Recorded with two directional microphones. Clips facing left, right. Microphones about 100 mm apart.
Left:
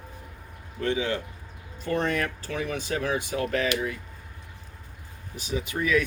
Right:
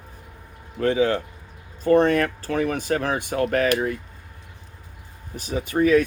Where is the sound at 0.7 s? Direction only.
40° right (ahead or behind).